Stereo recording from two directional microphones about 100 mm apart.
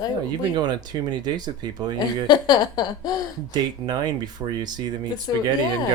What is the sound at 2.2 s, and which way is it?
Speech, 45° left (ahead or behind).